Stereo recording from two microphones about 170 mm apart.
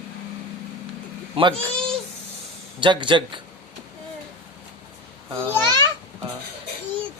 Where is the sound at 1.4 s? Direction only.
30° right (ahead or behind).